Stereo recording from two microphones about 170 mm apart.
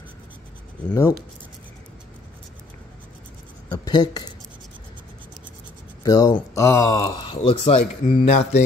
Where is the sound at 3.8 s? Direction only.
25° left (ahead or behind).